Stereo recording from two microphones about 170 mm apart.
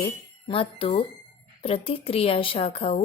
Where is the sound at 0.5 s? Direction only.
35° left (ahead or behind).